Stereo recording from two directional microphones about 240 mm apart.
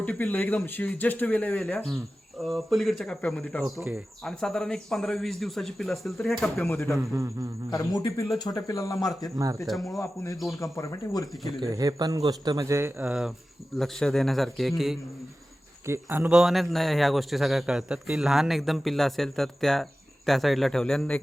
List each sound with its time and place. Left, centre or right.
0.0 s a man's voice: centre
9.6 s a man's voice: centre
10.6 s speech: centre
11.7 s a man's voice: centre